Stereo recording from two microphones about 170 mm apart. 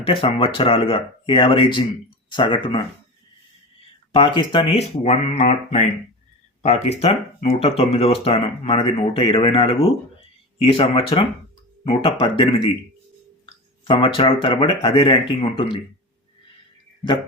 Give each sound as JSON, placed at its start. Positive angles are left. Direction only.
{"t": 0.0, "sound": "speech", "side_deg": 30}
{"t": 4.1, "sound": "speech", "side_deg": 30}
{"t": 13.4, "sound": "speech", "side_deg": 30}